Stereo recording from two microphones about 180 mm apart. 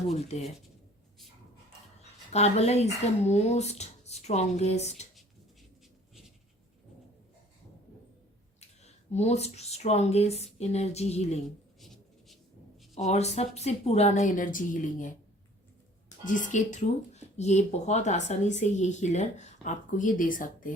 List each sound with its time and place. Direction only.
0.1 s speech: 35° left (ahead or behind)
2.3 s speech: 35° left (ahead or behind)
8.6 s speech: 40° left (ahead or behind)
12.9 s a woman's voice: 40° left (ahead or behind)